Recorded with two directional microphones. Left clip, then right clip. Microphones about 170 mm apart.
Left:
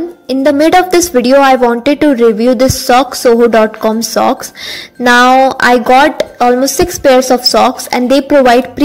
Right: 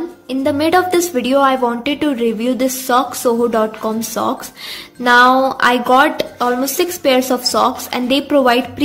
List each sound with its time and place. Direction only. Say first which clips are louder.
0.3 s a woman's voice: left 7 dB; 35° left (ahead or behind)